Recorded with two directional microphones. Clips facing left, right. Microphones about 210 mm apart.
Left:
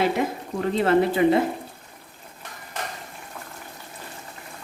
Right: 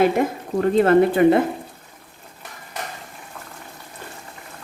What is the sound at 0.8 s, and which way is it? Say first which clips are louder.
Speech: right 4 dB; 50° right (ahead or behind).